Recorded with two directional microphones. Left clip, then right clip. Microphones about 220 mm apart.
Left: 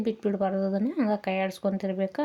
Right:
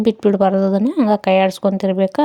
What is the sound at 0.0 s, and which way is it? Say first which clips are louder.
Speech: right 13 dB; 40° right (ahead or behind).